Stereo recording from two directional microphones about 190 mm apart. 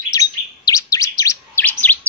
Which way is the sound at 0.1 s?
20° left (ahead or behind).